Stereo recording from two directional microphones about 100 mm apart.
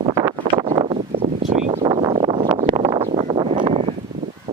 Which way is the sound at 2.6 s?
70° right (ahead or behind).